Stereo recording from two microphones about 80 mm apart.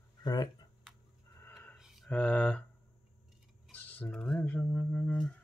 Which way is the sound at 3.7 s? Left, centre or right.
Left.